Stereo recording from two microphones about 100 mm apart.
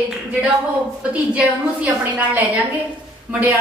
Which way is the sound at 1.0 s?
15° right (ahead or behind).